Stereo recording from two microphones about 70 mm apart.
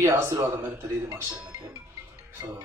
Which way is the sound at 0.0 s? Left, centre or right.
Right.